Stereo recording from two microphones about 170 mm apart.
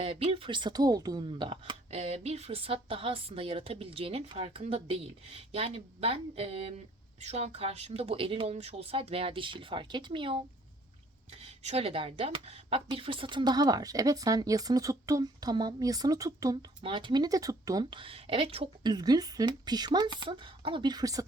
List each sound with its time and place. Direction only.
0.0 s a woman's voice: 35° right (ahead or behind)